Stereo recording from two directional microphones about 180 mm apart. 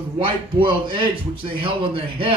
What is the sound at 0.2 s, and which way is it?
A man's voice, 25° right (ahead or behind).